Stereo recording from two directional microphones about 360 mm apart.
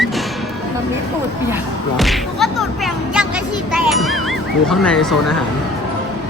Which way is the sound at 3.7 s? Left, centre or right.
Centre.